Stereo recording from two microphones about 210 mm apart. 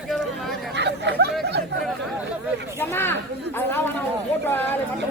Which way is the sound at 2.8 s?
10° left (ahead or behind).